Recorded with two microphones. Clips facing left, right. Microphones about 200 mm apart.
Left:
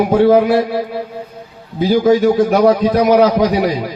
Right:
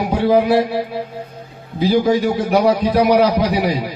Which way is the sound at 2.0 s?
45° left (ahead or behind).